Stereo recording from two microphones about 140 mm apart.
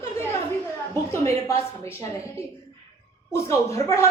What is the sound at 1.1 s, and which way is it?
Speech, 20° left (ahead or behind).